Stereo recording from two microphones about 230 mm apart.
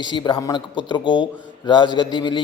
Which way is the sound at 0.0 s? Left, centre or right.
Centre.